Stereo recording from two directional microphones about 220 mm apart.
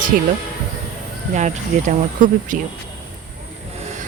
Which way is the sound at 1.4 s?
35° right (ahead or behind).